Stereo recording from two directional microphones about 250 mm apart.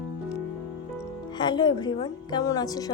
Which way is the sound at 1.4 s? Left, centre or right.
Centre.